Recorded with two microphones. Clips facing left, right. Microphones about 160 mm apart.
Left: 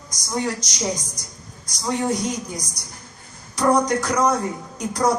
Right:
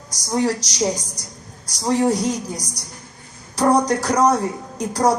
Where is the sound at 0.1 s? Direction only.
35° right (ahead or behind).